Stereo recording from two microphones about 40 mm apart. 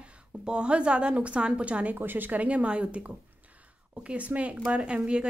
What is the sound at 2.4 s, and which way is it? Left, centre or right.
A woman's voice, right.